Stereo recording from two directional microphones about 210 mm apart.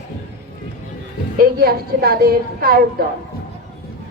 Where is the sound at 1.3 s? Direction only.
45° right (ahead or behind).